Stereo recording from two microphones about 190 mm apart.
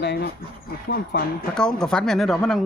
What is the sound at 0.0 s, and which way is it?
Speech, 60° left (ahead or behind).